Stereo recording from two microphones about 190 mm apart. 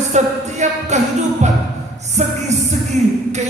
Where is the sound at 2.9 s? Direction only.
40° right (ahead or behind).